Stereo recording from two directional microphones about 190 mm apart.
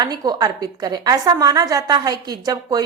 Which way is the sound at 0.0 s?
20° right (ahead or behind).